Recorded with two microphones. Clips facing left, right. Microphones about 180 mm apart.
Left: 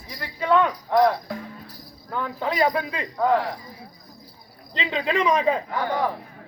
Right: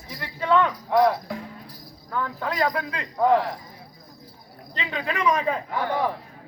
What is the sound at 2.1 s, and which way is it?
Speech, 20° left (ahead or behind).